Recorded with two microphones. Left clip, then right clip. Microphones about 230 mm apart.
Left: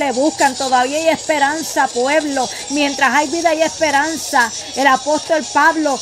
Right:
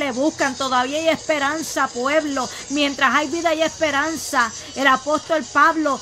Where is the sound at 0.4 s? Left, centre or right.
Centre.